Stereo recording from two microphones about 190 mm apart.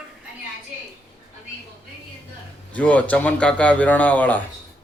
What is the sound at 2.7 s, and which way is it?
A man's voice, 5° left (ahead or behind).